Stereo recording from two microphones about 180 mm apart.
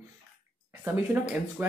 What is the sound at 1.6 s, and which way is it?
Speech, 10° right (ahead or behind).